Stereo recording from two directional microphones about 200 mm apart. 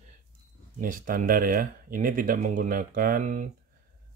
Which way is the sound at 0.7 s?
45° right (ahead or behind).